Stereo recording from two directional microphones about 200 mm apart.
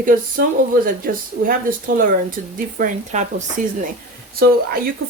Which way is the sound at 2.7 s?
40° right (ahead or behind).